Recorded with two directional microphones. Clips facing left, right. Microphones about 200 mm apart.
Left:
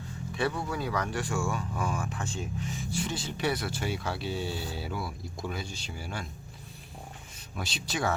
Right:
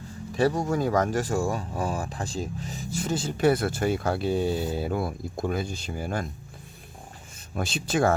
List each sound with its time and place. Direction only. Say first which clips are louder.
0.3 s speech: right 7 dB; 40° right (ahead or behind)
7.5 s speech: right 8 dB; 50° right (ahead or behind)